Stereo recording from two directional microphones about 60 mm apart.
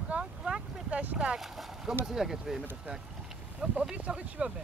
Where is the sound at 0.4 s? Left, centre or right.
Centre.